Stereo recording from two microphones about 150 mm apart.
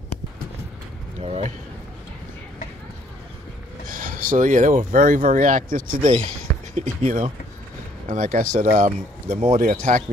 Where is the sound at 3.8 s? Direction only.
65° right (ahead or behind).